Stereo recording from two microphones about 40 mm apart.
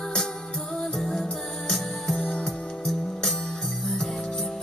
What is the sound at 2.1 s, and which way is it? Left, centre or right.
Music, left.